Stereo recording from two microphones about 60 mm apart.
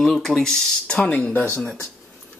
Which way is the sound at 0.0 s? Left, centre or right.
Centre.